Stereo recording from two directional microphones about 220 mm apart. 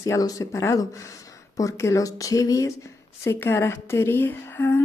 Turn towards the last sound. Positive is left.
turn(degrees=10)  # may be behind; listen again after turning